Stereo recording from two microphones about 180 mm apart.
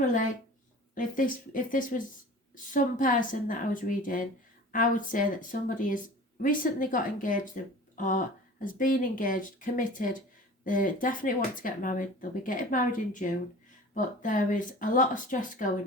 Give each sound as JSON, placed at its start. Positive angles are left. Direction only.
{"t": 0.0, "sound": "speech", "side_deg": 45}